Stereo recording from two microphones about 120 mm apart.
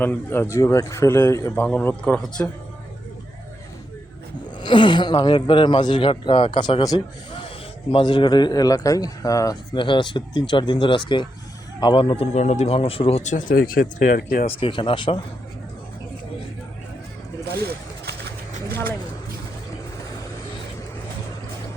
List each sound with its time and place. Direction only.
0.0 s a man's voice: 15° left (ahead or behind)
2.1 s a man's voice: 5° left (ahead or behind)
4.5 s speech: 40° left (ahead or behind)
9.7 s speech: 40° left (ahead or behind)
12.2 s speech: 70° left (ahead or behind); by 14.5 s 90° left
14.6 s speech: 45° left (ahead or behind)
18.7 s vehicle: 20° left (ahead or behind)